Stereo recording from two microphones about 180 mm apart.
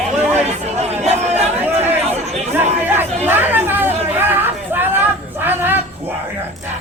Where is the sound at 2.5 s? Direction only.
10° right (ahead or behind).